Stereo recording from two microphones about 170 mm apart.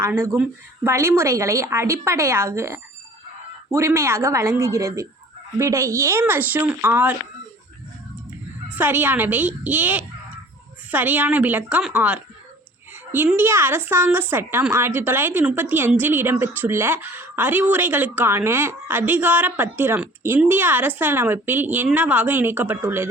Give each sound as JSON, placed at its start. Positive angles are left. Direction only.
{"t": 0.0, "sound": "speech", "side_deg": -15}
{"t": 8.7, "sound": "speech", "side_deg": -10}